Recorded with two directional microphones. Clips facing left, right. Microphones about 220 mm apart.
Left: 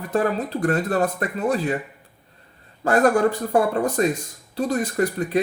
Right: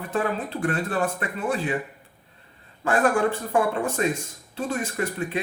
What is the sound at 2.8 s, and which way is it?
Speech, 40° left (ahead or behind).